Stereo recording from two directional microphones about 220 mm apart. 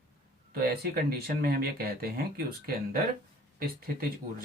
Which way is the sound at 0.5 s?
45° right (ahead or behind).